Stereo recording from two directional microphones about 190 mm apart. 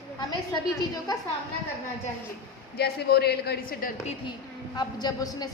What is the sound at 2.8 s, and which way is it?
A man's voice, 55° left (ahead or behind).